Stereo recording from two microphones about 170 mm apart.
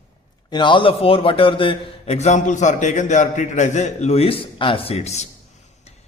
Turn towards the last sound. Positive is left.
turn(degrees=40)  # may be behind; listen again after turning